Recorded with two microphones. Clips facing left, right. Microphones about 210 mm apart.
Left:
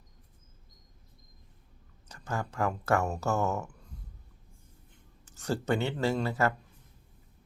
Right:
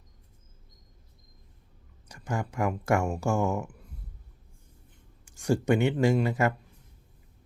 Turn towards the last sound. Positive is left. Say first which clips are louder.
# right 4 dB
turn(degrees=-15)  # may be behind; listen again after turning